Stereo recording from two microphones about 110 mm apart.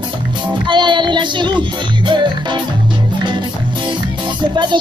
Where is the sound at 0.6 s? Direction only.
45° right (ahead or behind).